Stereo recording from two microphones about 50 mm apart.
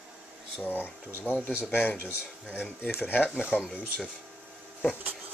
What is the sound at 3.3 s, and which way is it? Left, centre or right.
Speech, right.